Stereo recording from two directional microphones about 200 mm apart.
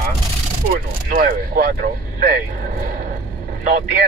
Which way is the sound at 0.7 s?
45° right (ahead or behind).